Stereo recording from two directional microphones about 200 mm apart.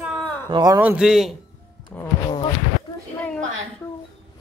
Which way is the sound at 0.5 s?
20° right (ahead or behind).